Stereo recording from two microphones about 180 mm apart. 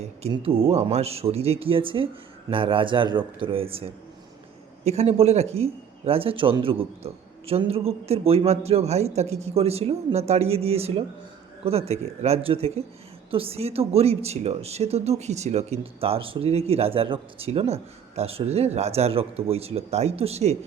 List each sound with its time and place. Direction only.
0.0 s a man's voice: 35° right (ahead or behind)
4.9 s a man's voice: 35° right (ahead or behind)